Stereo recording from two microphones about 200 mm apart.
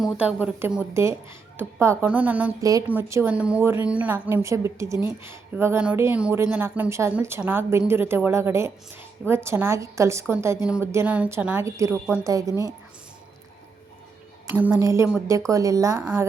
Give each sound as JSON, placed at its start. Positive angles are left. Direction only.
{"t": 0.0, "sound": "a woman's voice", "side_deg": -5}
{"t": 14.5, "sound": "a woman's voice", "side_deg": -10}